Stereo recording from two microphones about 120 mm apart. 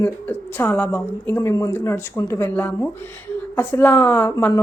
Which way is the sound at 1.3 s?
25° left (ahead or behind).